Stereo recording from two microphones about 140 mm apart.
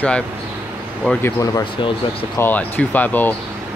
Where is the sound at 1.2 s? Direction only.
20° left (ahead or behind).